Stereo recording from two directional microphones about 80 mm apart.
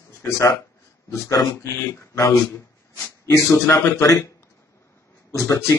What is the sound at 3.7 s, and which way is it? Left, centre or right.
Speech, left.